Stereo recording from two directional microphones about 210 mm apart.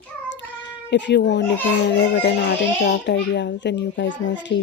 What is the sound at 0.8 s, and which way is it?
A child's voice, 55° left (ahead or behind).